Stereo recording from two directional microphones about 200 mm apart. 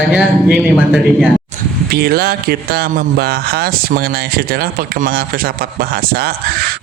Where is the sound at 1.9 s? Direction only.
50° right (ahead or behind).